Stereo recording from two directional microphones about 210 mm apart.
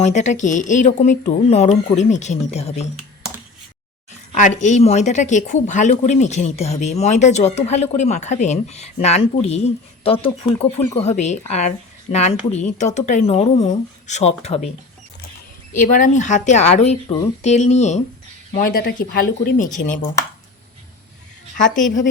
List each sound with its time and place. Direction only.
0.0 s a woman's voice: 35° left (ahead or behind)
4.4 s a woman's voice: 35° left (ahead or behind)
15.8 s a woman's voice: 40° left (ahead or behind)
18.5 s speech: 45° left (ahead or behind)